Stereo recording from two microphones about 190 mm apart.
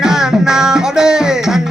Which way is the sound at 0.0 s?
5° right (ahead or behind).